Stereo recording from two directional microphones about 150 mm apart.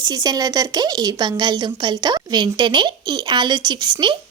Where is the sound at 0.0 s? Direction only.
25° right (ahead or behind).